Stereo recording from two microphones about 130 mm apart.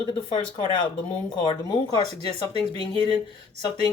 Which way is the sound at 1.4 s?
35° left (ahead or behind).